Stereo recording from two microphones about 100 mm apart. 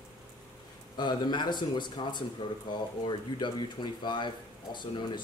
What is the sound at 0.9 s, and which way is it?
Speech, 50° left (ahead or behind).